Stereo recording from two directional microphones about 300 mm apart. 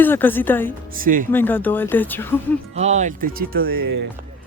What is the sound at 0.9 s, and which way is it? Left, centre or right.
Speech, right.